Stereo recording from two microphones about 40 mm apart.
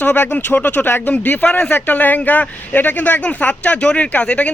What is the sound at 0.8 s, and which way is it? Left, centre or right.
Speech, left.